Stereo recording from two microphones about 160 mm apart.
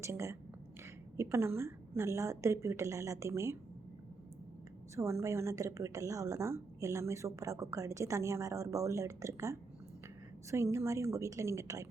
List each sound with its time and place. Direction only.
0.0 s a woman's voice: 20° right (ahead or behind)
4.9 s a woman's voice: 20° right (ahead or behind)